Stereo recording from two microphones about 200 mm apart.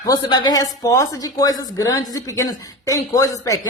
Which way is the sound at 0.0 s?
20° left (ahead or behind).